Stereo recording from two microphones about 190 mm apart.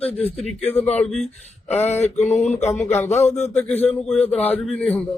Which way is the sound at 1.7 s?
35° left (ahead or behind).